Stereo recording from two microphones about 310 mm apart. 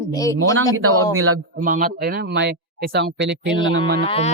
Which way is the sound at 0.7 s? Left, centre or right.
Right.